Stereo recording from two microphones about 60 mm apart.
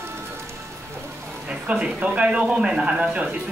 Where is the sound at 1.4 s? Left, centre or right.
Centre.